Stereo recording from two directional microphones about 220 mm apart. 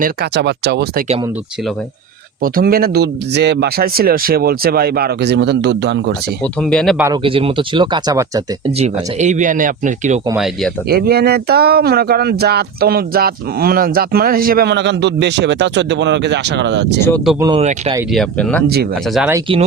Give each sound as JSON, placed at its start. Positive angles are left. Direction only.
{"t": 0.0, "sound": "speech", "side_deg": -45}
{"t": 2.4, "sound": "speech", "side_deg": -40}
{"t": 6.4, "sound": "speech", "side_deg": 5}
{"t": 7.0, "sound": "speech", "side_deg": -20}
{"t": 8.8, "sound": "speech", "side_deg": -30}
{"t": 10.3, "sound": "speech", "side_deg": 0}
{"t": 10.8, "sound": "speech", "side_deg": -45}
{"t": 17.4, "sound": "speech", "side_deg": -25}
{"t": 18.1, "sound": "speech", "side_deg": 0}